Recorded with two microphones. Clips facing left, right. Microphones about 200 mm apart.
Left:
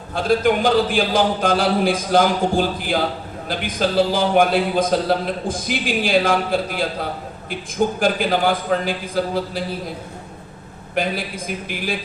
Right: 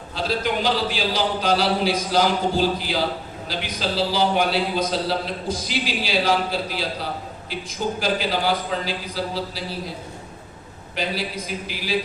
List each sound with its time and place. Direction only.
0.1 s a man's voice: 50° left (ahead or behind)
10.9 s a man's voice: 50° left (ahead or behind)